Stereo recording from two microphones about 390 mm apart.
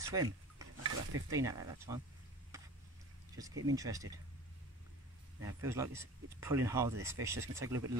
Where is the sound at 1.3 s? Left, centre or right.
Centre.